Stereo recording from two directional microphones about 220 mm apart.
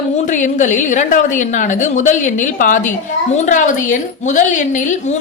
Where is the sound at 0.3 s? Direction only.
35° left (ahead or behind).